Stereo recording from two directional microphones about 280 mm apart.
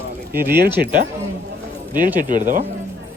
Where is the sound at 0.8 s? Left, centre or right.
Right.